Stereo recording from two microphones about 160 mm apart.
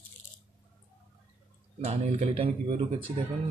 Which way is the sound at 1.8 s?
45° right (ahead or behind).